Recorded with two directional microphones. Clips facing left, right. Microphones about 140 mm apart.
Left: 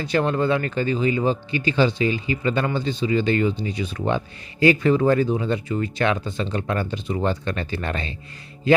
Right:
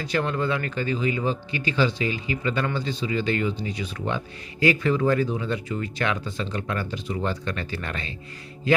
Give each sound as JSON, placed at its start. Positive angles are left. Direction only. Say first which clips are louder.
{"t": 0.0, "sound": "speech", "louder": "left 4 dB", "side_deg": 30}